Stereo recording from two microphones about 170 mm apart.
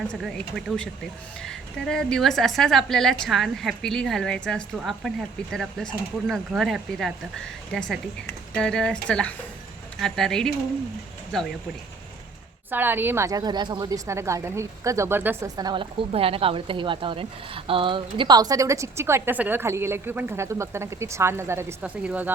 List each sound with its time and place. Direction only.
0.1 s a woman's voice: 5° left (ahead or behind)
12.7 s a woman's voice: 10° right (ahead or behind)